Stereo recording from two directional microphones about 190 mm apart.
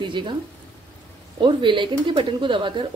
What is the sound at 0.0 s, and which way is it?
Speech, 25° right (ahead or behind).